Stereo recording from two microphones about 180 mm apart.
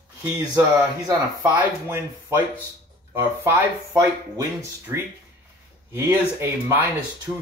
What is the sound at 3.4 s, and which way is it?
Speech, 20° right (ahead or behind).